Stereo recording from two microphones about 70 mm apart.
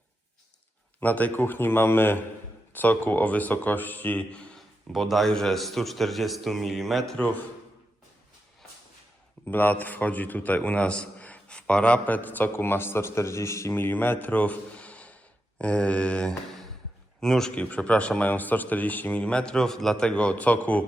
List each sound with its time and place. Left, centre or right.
0.9 s a man's voice: left
4.9 s a man's voice: centre
7.2 s a man's voice: left
9.5 s a man's voice: left
13.7 s a man's voice: left; by 17.5 s centre
17.5 s a man's voice: centre
20.1 s a man's voice: centre